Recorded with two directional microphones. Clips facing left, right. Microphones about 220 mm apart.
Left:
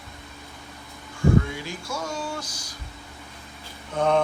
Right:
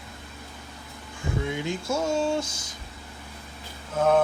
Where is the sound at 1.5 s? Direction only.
20° right (ahead or behind).